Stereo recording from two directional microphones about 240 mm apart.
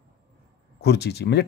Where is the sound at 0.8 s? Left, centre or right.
Left.